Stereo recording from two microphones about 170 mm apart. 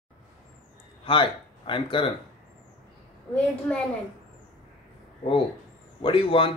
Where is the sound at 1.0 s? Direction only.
30° left (ahead or behind).